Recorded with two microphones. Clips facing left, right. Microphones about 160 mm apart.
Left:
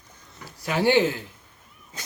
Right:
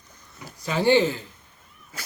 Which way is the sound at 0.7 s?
10° left (ahead or behind).